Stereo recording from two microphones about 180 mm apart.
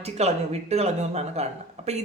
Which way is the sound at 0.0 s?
35° right (ahead or behind).